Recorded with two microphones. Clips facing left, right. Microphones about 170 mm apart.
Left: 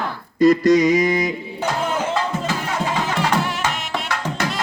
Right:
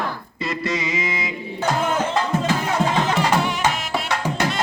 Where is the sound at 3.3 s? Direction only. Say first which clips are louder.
Right 1 dB; centre (ahead or behind).